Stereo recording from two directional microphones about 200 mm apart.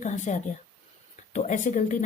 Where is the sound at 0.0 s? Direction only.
40° left (ahead or behind).